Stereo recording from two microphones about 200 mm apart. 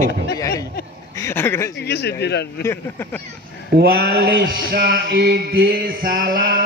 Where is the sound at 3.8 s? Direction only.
50° right (ahead or behind).